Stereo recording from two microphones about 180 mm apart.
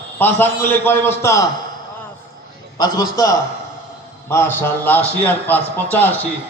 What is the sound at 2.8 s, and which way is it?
Speech, 20° left (ahead or behind).